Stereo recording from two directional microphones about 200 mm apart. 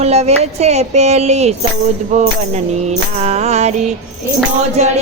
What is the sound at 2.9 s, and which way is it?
Speech, 35° right (ahead or behind).